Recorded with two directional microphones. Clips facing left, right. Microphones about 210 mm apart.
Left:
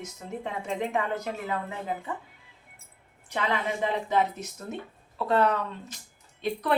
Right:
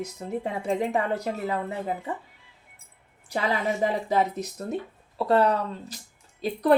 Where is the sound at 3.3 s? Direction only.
35° right (ahead or behind).